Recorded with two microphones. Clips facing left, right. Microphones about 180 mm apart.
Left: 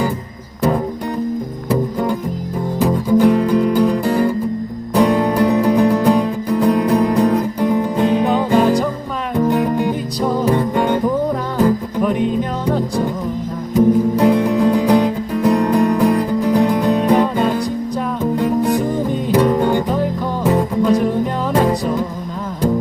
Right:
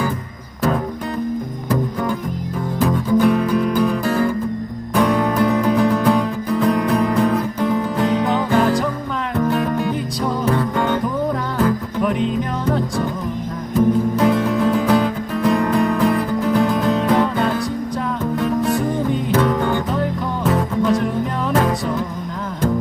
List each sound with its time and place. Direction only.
1.7 s music: 15° left (ahead or behind)